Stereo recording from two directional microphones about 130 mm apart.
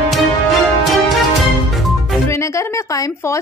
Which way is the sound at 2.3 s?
20° left (ahead or behind).